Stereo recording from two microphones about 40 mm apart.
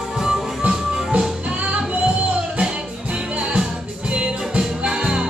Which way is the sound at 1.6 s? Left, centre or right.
Right.